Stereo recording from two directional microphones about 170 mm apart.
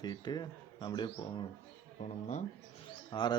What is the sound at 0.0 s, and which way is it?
Speech, 25° left (ahead or behind).